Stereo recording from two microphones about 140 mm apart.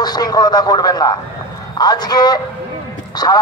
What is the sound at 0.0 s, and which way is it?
Speech, 30° left (ahead or behind).